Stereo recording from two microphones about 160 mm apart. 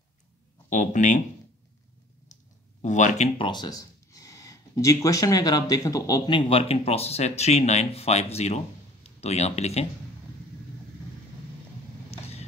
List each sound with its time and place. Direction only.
0.7 s speech: 50° left (ahead or behind)
2.8 s speech: 50° left (ahead or behind)
3.3 s speech: 30° left (ahead or behind)
12.1 s vehicle: 40° left (ahead or behind)